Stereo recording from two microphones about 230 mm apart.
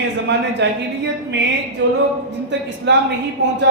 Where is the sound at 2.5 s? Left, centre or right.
Right.